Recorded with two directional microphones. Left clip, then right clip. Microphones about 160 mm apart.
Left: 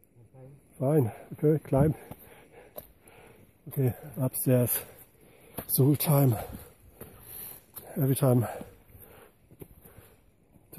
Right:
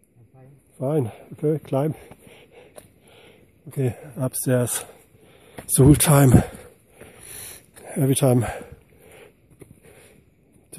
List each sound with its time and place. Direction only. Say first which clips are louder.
0.7 s speech: right 3 dB; 25° right (ahead or behind)
3.1 s a sound: right 4 dB; 35° right (ahead or behind)
3.8 s speech: right 5 dB; 50° right (ahead or behind)
4.2 s speech: right 4 dB; 25° right (ahead or behind)
5.9 s speech: right 10 dB; 50° right (ahead or behind)
7.8 s speech: right 7 dB; 55° right (ahead or behind)